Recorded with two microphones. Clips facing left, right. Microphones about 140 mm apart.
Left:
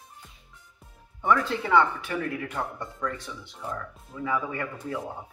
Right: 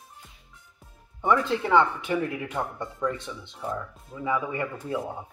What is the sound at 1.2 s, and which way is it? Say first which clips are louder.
Speech: right 1 dB; 20° right (ahead or behind).